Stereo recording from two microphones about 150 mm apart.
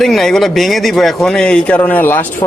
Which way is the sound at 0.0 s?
Centre (ahead or behind).